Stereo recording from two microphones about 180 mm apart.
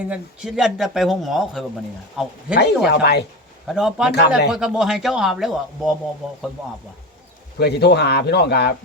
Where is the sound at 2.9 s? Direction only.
65° left (ahead or behind).